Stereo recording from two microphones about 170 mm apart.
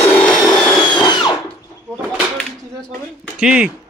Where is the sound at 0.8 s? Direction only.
25° left (ahead or behind).